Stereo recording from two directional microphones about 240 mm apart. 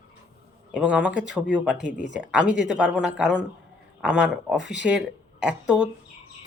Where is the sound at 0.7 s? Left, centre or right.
Centre.